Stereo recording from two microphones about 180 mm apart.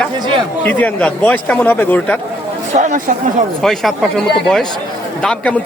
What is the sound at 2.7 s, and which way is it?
Speech, 40° right (ahead or behind).